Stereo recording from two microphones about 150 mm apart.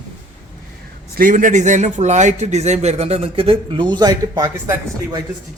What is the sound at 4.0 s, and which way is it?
Speech, 25° right (ahead or behind).